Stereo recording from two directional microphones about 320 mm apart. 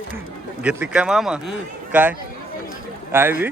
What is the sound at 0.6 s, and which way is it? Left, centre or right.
A man's voice, centre.